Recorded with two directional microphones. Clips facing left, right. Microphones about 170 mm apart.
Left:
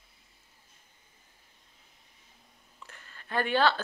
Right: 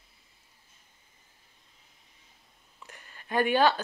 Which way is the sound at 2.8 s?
15° right (ahead or behind).